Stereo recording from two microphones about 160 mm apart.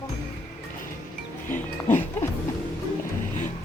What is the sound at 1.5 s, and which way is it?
Music, 50° left (ahead or behind).